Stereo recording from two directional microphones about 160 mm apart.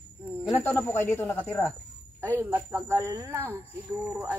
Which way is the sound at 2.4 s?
15° right (ahead or behind).